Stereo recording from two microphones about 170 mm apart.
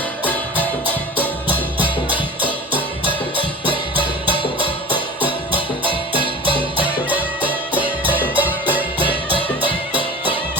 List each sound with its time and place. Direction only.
3.0 s music: 30° right (ahead or behind)
7.1 s music: 10° right (ahead or behind)